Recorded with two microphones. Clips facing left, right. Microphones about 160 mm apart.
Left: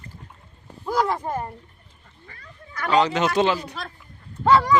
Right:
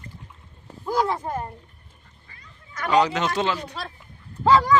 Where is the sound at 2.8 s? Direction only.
5° right (ahead or behind).